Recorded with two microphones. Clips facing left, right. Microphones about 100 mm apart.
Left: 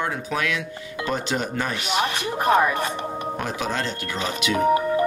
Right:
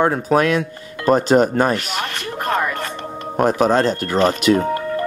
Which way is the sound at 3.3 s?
45° right (ahead or behind).